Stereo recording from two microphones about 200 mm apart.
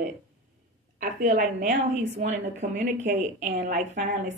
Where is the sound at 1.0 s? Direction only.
45° right (ahead or behind).